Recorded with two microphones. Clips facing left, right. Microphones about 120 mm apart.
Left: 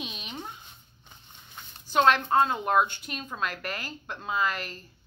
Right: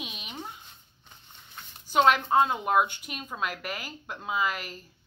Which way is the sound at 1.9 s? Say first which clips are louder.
Even; 10° right (ahead or behind).